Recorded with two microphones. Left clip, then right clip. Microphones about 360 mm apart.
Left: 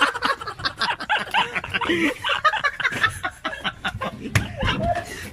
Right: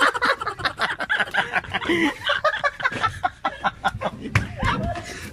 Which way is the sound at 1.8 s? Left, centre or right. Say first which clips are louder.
Left 2 dB; centre.